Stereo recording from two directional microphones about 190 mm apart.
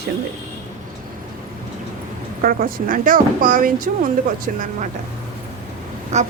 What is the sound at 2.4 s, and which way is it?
Speech, 50° right (ahead or behind).